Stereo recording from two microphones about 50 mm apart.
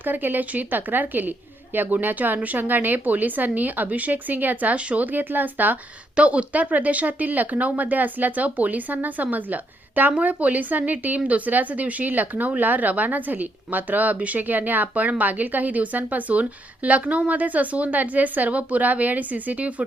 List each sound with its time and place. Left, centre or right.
0.0 s speech: right
6.1 s speech: right